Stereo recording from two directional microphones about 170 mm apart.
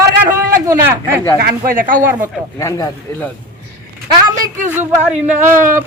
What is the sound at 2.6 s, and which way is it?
Speech, 20° left (ahead or behind).